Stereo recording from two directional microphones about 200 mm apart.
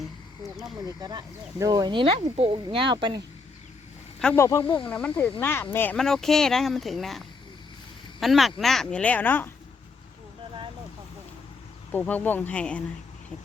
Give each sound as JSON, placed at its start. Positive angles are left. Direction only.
{"t": 0.9, "sound": "speech", "side_deg": -20}
{"t": 4.2, "sound": "speech", "side_deg": 10}
{"t": 4.6, "sound": "speech", "side_deg": 25}
{"t": 4.9, "sound": "speech", "side_deg": 5}
{"t": 8.2, "sound": "speech", "side_deg": 0}
{"t": 11.9, "sound": "speech", "side_deg": 10}